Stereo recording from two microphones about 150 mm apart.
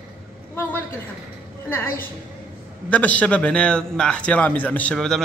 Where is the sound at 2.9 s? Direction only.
10° left (ahead or behind).